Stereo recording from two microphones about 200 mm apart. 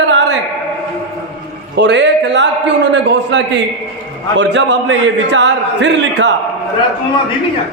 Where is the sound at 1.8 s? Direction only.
60° right (ahead or behind).